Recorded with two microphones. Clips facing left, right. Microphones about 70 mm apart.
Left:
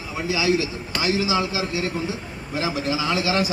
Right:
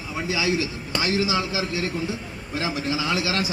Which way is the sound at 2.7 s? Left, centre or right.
Centre.